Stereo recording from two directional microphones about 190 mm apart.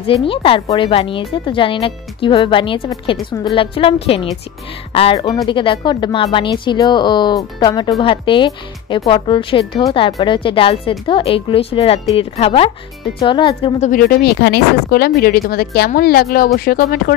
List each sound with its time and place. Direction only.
0.0 s speech: 30° left (ahead or behind)
13.7 s speech: 45° left (ahead or behind)